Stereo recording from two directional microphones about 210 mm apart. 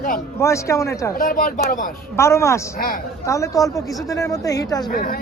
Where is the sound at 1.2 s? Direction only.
40° left (ahead or behind).